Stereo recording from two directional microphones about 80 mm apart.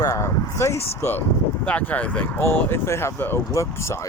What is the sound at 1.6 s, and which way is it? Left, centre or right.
Speech, centre.